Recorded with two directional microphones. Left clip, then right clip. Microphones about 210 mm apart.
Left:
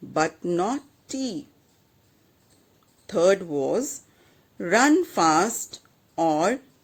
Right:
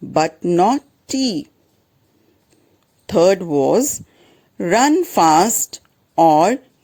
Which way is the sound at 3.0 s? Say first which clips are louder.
Right 7 dB; 40° right (ahead or behind).